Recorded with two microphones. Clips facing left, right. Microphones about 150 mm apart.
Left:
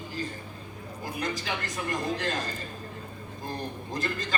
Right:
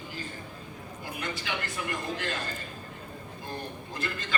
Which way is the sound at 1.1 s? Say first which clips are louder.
Left 4 dB; 40° left (ahead or behind).